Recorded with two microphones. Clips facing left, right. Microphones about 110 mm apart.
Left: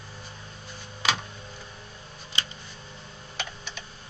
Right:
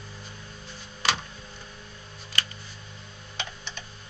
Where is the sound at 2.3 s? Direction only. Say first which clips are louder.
Right 1 dB; 20° left (ahead or behind).